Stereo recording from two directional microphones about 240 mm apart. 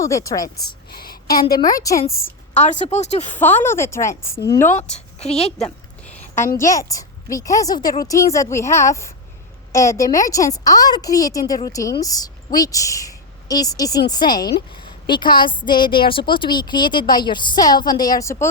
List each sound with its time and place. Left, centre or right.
0.0 s a woman's voice: centre
0.9 s a sound: left
1.5 s a woman's voice: centre
2.6 s a woman's voice: left
3.3 s a woman's voice: centre
4.8 s a woman's voice: left
5.5 s speech: centre
6.6 s a woman's voice: centre